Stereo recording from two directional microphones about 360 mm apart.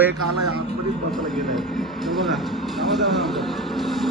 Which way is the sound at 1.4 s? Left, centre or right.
Centre.